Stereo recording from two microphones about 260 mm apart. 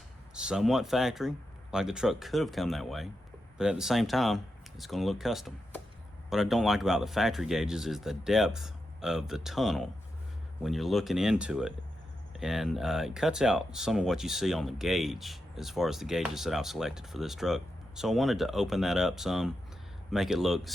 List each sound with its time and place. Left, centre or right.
0.3 s speech: centre